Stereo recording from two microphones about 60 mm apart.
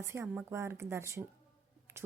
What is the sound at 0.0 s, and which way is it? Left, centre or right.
Speech, right.